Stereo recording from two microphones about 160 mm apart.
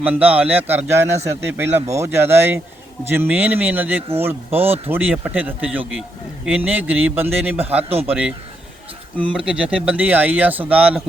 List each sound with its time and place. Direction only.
0.0 s speech: 10° right (ahead or behind)
7.9 s a man's voice: 40° right (ahead or behind)
9.3 s speech: 5° right (ahead or behind)